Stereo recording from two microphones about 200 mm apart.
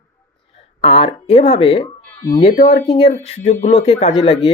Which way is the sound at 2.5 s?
40° left (ahead or behind).